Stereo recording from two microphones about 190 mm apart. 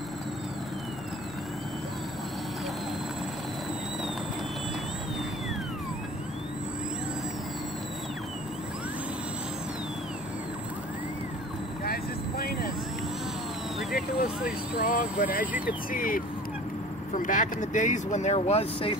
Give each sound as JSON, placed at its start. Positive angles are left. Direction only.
{"t": 11.8, "sound": "vehicle", "side_deg": 55}
{"t": 13.7, "sound": "vehicle", "side_deg": 0}
{"t": 14.4, "sound": "vehicle", "side_deg": 45}
{"t": 15.6, "sound": "speech", "side_deg": 45}
{"t": 17.2, "sound": "speech", "side_deg": 40}